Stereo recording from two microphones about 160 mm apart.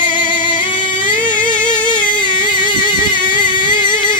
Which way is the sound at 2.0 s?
30° left (ahead or behind).